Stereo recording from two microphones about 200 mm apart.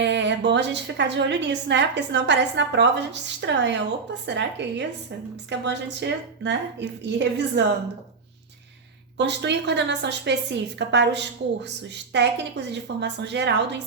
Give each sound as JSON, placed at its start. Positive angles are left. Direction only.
{"t": 0.0, "sound": "a woman's voice", "side_deg": -60}
{"t": 9.1, "sound": "a woman's voice", "side_deg": -60}